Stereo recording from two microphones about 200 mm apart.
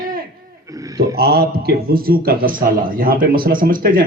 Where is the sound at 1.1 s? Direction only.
50° right (ahead or behind).